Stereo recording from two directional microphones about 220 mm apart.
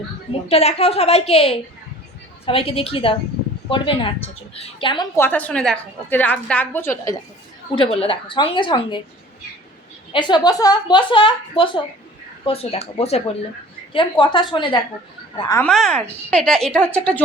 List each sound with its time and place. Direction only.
0.4 s a woman's voice: 25° left (ahead or behind)
7.8 s a woman's voice: 25° left (ahead or behind)
10.1 s a woman's voice: 20° left (ahead or behind)
15.7 s a woman's voice: 5° left (ahead or behind)